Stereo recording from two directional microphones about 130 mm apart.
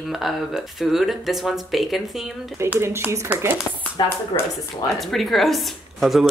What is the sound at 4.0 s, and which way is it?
Speech, 35° left (ahead or behind).